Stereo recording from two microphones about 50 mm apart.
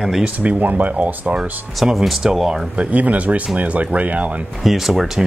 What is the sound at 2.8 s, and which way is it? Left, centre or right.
Speech, right.